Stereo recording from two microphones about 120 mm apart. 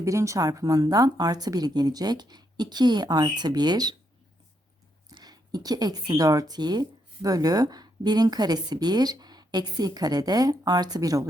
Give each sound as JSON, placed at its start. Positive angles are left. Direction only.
{"t": 0.0, "sound": "speech", "side_deg": -25}
{"t": 5.1, "sound": "speech", "side_deg": -35}